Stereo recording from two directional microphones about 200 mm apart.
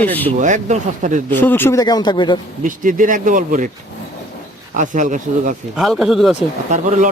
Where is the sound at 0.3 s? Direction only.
40° right (ahead or behind).